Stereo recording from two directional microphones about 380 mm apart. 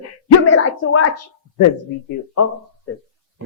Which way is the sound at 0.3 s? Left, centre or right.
Left.